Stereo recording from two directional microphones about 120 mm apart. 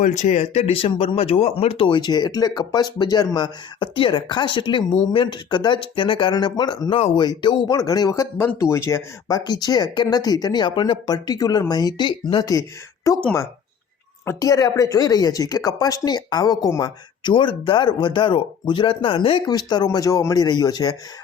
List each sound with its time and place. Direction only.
0.0 s speech: 90° left; by 9.4 s 25° left (ahead or behind)
9.4 s speech: 35° left (ahead or behind)
14.3 s speech: 30° left (ahead or behind); by 19.4 s 50° left (ahead or behind)
19.5 s speech: 35° left (ahead or behind)